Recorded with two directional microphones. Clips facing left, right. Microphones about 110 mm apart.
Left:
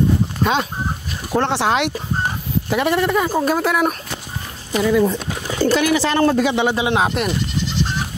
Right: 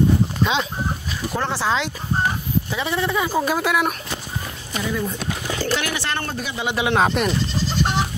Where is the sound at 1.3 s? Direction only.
65° left (ahead or behind).